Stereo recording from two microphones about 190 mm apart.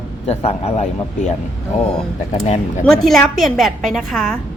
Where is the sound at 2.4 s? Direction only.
35° left (ahead or behind).